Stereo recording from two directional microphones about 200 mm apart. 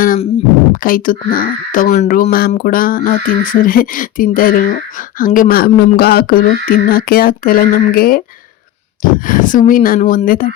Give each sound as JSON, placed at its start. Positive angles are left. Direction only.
{"t": 0.7, "sound": "speech", "side_deg": 45}